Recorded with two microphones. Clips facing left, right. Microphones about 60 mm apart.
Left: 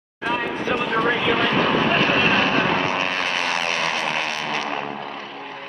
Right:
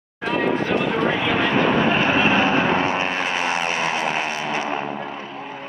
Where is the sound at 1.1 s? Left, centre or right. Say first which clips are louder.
Even; centre.